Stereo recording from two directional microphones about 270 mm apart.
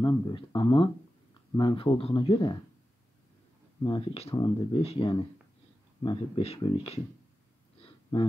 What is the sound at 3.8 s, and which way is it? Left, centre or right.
Speech, centre.